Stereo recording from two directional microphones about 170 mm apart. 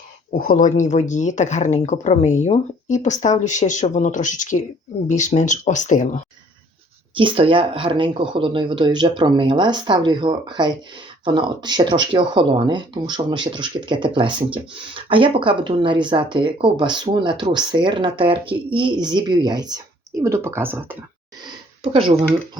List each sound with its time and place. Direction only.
0.3 s speech: 55° left (ahead or behind)
7.2 s speech: 30° right (ahead or behind); by 21.0 s 15° right (ahead or behind)
21.9 s speech: 35° right (ahead or behind)